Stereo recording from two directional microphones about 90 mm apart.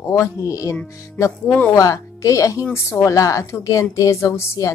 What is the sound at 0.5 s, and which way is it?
A woman's voice, 35° left (ahead or behind).